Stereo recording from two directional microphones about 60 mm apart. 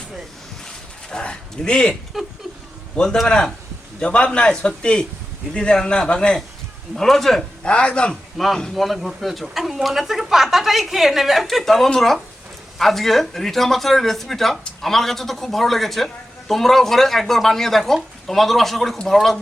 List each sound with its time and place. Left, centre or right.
1.1 s a sound: centre
3.0 s a man's voice: centre
7.6 s a man's voice: centre
8.1 s speech: centre